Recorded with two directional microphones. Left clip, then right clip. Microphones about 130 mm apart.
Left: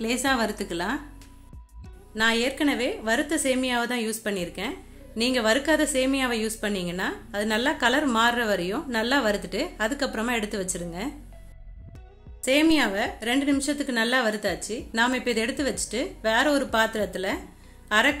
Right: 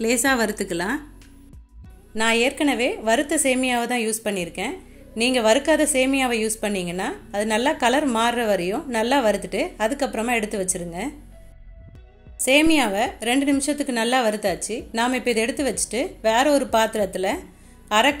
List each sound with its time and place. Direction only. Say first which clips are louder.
0.0 s speech: right 4 dB; 35° right (ahead or behind)
2.1 s a woman's voice: right 3 dB; 25° right (ahead or behind)
12.4 s a woman's voice: right 4 dB; 25° right (ahead or behind)